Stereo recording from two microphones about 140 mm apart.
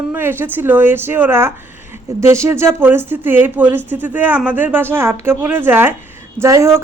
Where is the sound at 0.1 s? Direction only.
15° right (ahead or behind).